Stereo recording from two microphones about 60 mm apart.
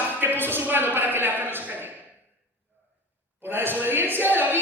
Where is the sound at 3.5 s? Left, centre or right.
Right.